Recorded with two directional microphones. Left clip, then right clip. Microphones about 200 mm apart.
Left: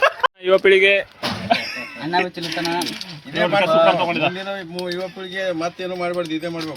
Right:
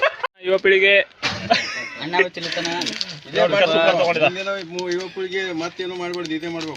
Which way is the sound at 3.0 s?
35° right (ahead or behind).